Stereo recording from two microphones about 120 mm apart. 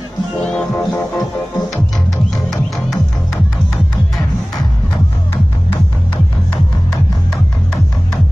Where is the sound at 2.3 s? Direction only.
30° left (ahead or behind).